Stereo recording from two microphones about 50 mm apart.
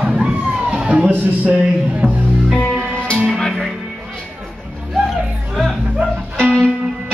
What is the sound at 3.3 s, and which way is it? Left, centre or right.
Music, centre.